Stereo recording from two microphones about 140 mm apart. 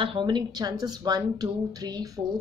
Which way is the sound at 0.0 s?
35° right (ahead or behind).